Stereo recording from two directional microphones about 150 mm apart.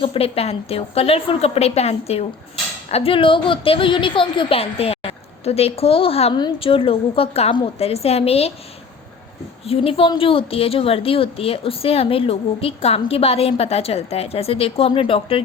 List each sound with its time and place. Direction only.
0.0 s a woman's voice: 40° left (ahead or behind)
9.6 s a woman's voice: 40° left (ahead or behind)